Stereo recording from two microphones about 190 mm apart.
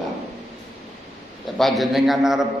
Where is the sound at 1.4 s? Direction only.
Centre (ahead or behind).